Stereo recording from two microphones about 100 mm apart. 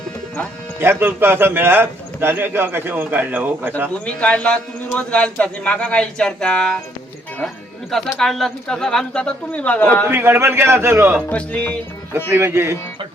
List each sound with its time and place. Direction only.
0.8 s a man's voice: 20° right (ahead or behind)
3.9 s speech: 10° left (ahead or behind)
10.1 s a man's voice: 20° right (ahead or behind)
11.3 s speech: 10° left (ahead or behind)
12.1 s a man's voice: 20° right (ahead or behind)